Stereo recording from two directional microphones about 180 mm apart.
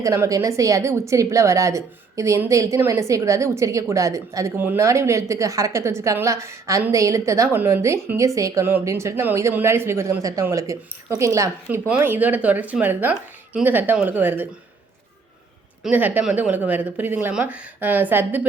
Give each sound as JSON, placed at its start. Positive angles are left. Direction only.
{"t": 0.0, "sound": "a woman's voice", "side_deg": -15}
{"t": 15.8, "sound": "a woman's voice", "side_deg": -10}